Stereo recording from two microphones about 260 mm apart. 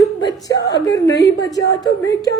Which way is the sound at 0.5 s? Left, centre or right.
Left.